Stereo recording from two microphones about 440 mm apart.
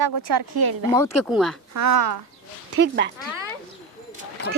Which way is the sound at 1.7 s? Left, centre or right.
Right.